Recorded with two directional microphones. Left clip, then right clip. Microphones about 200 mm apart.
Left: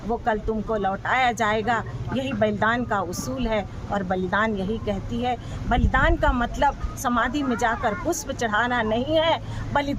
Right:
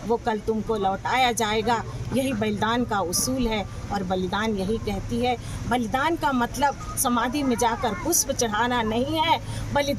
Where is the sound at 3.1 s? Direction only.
30° left (ahead or behind).